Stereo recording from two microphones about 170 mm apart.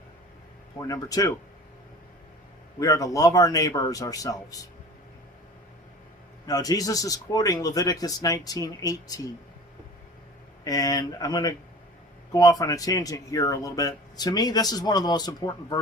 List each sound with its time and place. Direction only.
0.8 s speech: 20° left (ahead or behind)
2.7 s speech: 20° left (ahead or behind)
6.4 s speech: 20° left (ahead or behind)
10.6 s speech: 20° left (ahead or behind)